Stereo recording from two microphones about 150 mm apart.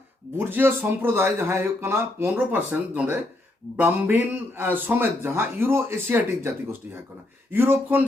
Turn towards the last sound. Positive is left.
turn(degrees=-15)  # may be behind; listen again after turning